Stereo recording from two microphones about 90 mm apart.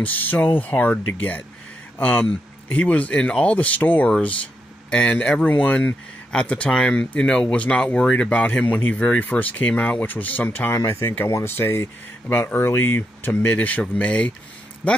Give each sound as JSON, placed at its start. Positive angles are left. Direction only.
{"t": 0.0, "sound": "speech", "side_deg": 20}